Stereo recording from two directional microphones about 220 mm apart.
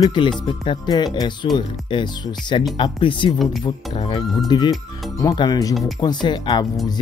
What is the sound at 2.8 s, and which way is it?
Speech, 20° left (ahead or behind).